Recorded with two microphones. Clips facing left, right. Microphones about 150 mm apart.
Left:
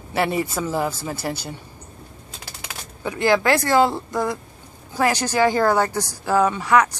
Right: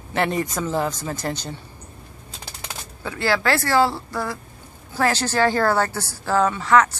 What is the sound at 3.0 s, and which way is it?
A woman's voice, 15° left (ahead or behind).